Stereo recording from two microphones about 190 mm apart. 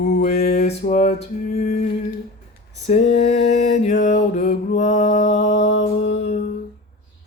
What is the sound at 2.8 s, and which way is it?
Speech, 35° left (ahead or behind).